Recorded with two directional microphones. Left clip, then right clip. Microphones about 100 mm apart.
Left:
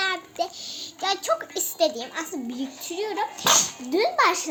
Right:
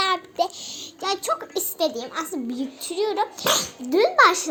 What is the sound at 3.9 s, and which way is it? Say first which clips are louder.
Speech: right 5 dB; 35° right (ahead or behind).